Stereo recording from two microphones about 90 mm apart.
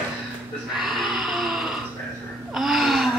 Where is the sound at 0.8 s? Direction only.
Centre (ahead or behind).